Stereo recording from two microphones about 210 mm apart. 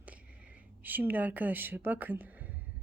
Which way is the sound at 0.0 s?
5° right (ahead or behind).